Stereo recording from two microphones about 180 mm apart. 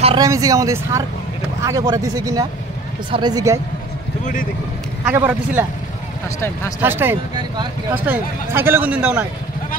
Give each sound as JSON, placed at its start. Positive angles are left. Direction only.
{"t": 0.2, "sound": "speech", "side_deg": -20}
{"t": 5.0, "sound": "speech", "side_deg": -10}
{"t": 6.8, "sound": "speech", "side_deg": -10}